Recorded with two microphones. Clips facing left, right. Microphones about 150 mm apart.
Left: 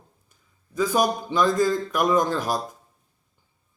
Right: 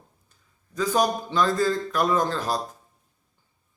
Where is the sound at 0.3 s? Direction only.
10° left (ahead or behind).